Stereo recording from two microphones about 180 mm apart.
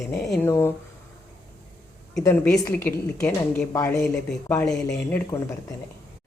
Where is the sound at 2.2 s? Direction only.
20° left (ahead or behind).